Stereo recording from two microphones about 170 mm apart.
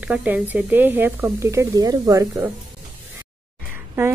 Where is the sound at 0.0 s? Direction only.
10° right (ahead or behind).